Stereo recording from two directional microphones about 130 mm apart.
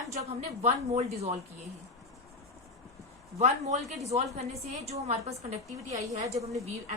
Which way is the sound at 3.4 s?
60° right (ahead or behind).